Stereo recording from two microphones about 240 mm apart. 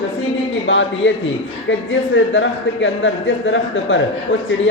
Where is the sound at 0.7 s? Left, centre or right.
Left.